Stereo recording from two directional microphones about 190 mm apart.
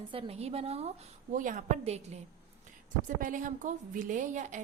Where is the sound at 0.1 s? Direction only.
30° right (ahead or behind).